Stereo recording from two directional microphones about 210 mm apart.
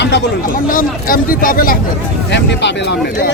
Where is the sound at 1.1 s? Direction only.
40° left (ahead or behind).